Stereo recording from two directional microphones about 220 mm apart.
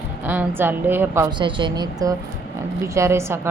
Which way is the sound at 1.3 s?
20° right (ahead or behind).